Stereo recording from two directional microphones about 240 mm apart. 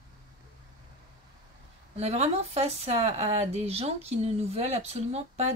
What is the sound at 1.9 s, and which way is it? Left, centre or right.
Speech, right.